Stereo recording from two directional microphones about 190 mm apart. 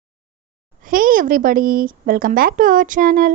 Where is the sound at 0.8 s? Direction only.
45° right (ahead or behind).